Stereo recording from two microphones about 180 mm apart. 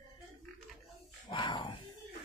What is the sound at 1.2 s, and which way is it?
Speech, 25° left (ahead or behind).